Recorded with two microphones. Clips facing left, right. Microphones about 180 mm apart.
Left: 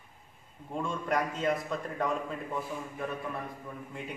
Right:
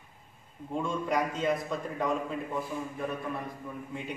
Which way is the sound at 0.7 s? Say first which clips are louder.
Right 1 dB; centre (ahead or behind).